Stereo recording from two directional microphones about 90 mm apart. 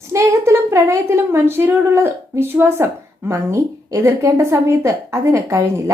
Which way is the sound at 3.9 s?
35° right (ahead or behind).